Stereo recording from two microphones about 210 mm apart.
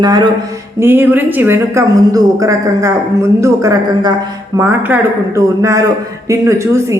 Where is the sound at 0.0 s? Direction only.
20° right (ahead or behind).